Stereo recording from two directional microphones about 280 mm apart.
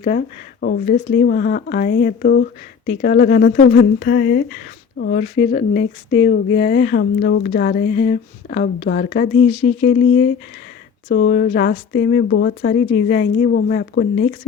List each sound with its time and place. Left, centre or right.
0.0 s speech: left